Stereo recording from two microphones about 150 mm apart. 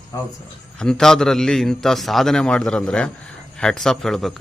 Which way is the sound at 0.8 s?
5° left (ahead or behind).